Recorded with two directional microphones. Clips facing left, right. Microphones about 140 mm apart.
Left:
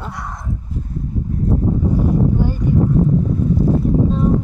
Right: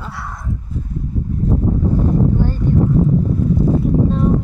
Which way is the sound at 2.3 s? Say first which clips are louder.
Even; 10° left (ahead or behind).